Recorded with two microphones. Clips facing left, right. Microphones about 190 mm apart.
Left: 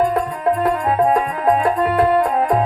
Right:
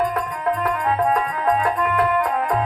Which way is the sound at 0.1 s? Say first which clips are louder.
Left 5 dB; 30° left (ahead or behind).